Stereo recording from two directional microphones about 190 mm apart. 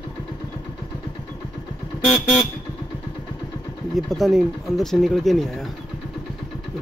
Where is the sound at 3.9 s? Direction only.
Centre (ahead or behind).